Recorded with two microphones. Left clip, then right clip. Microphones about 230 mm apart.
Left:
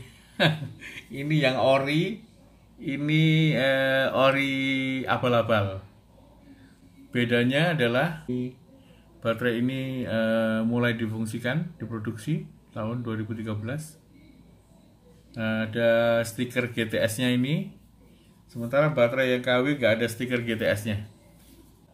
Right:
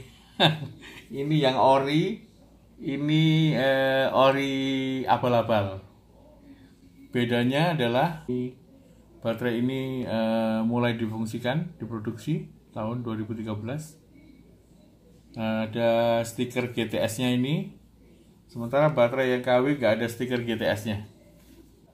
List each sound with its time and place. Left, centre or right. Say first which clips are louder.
0.4 s mantra: right 2 dB; centre
2.8 s mantra: even; centre
7.1 s mantra: left 1 dB; centre
9.2 s mantra: left 2 dB; centre
15.3 s mantra: left 1 dB; left